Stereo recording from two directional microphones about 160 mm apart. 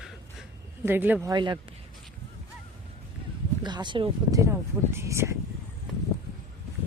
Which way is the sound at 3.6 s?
30° right (ahead or behind).